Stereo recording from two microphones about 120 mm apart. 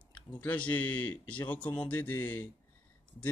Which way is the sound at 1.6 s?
40° left (ahead or behind).